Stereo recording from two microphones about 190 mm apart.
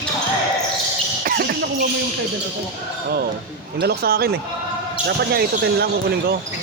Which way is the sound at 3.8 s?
55° right (ahead or behind).